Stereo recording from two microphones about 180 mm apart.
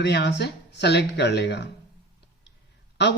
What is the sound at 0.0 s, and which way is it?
Speech, 70° left (ahead or behind).